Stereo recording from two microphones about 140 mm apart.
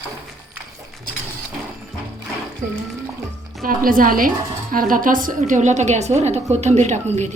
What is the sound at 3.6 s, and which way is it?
A woman's voice, 85° right.